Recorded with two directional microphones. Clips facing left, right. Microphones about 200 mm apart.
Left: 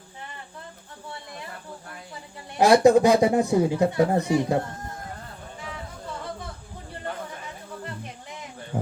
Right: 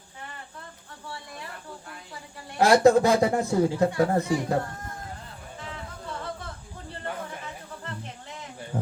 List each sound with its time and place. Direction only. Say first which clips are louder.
2.6 s a man's voice: left 2 dB; 15° left (ahead or behind)
7.9 s music: left 1 dB; 15° left (ahead or behind)